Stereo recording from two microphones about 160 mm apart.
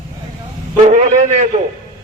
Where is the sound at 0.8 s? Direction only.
45° right (ahead or behind).